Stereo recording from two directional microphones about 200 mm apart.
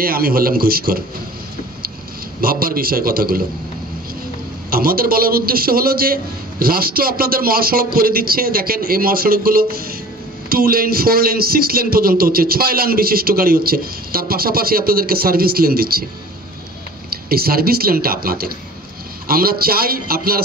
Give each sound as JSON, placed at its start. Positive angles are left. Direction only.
{"t": 0.0, "sound": "speech", "side_deg": -45}
{"t": 2.4, "sound": "speech", "side_deg": -50}
{"t": 4.6, "sound": "speech", "side_deg": -45}
{"t": 17.1, "sound": "speech", "side_deg": -50}